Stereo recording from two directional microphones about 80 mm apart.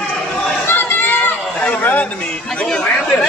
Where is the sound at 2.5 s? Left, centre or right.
Centre.